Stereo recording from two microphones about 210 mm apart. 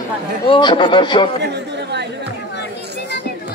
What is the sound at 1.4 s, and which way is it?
Chatter, 55° right (ahead or behind).